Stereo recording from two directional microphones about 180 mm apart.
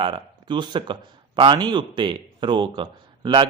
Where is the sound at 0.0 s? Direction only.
25° right (ahead or behind).